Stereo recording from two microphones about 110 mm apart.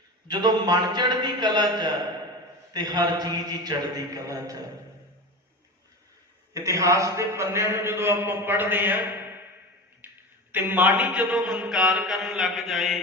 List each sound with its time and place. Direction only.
0.3 s a man's voice: 40° right (ahead or behind)
6.5 s a man's voice: 30° right (ahead or behind)
10.0 s a sound: 15° right (ahead or behind)
10.5 s mantra: 15° right (ahead or behind); by 13.0 s centre (ahead or behind)